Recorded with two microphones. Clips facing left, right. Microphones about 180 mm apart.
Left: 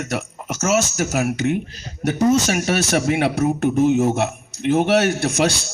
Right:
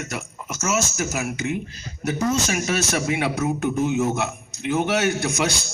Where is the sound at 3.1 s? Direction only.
60° left (ahead or behind).